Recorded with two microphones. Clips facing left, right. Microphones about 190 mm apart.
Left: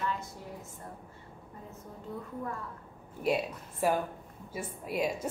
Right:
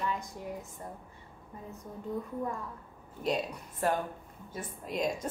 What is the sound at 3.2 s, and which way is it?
Speech, 10° left (ahead or behind).